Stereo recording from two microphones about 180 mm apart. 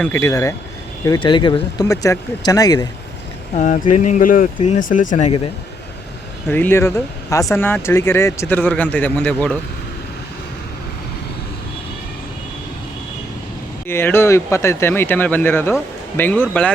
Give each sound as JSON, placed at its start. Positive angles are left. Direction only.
{"t": 0.0, "sound": "speech", "side_deg": 15}
{"t": 3.5, "sound": "speech", "side_deg": 45}
{"t": 6.5, "sound": "speech", "side_deg": 10}
{"t": 13.8, "sound": "speech", "side_deg": 15}